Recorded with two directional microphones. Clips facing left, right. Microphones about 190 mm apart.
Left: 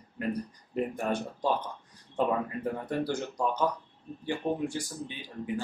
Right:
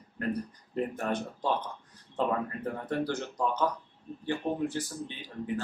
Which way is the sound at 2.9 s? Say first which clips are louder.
Left 1 dB; 10° left (ahead or behind).